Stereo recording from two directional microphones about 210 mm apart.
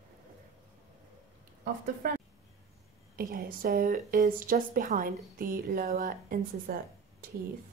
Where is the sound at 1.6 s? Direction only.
45° right (ahead or behind).